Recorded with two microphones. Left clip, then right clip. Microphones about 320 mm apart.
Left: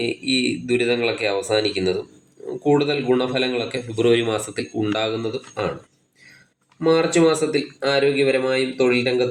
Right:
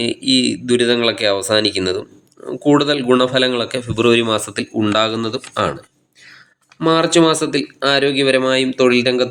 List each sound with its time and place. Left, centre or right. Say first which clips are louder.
0.0 s speech: right 5 dB; right
6.7 s speech: right 4 dB; right